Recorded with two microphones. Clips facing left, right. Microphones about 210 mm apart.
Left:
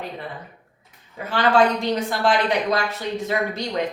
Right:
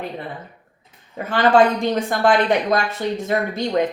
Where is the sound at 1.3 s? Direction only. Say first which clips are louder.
Right 3 dB; 50° right (ahead or behind).